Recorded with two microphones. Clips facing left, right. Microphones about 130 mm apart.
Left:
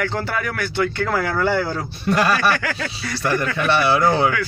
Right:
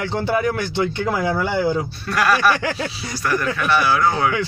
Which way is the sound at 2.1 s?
25° left (ahead or behind).